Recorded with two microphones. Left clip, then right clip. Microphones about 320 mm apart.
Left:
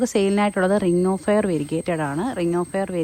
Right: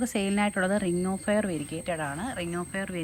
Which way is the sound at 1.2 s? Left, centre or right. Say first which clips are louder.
Left 7 dB; centre.